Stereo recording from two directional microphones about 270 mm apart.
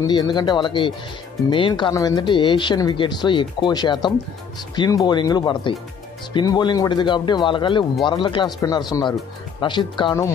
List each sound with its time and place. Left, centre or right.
0.0 s speech: centre